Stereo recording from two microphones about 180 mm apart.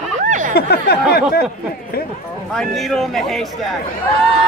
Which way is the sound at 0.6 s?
60° left (ahead or behind).